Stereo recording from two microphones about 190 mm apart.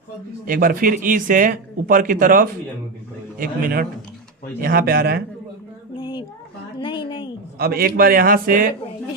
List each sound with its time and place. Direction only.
0.4 s speech: 45° right (ahead or behind)
6.0 s a sound: 25° left (ahead or behind)
7.6 s speech: 55° right (ahead or behind)